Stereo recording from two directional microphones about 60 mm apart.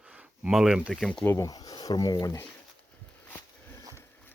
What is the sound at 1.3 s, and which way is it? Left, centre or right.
Speech, left.